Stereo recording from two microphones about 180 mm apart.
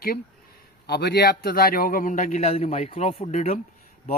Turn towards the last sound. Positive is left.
turn(degrees=40)  # may be behind; listen again after turning